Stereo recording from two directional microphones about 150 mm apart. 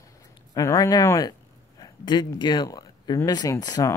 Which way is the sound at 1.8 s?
30° left (ahead or behind).